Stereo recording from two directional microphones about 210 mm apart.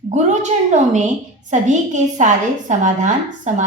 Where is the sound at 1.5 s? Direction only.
35° right (ahead or behind).